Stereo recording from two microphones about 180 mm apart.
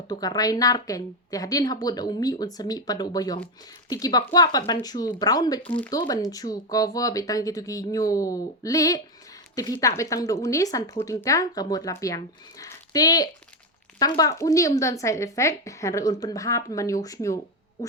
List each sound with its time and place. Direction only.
0.1 s speech: 20° left (ahead or behind)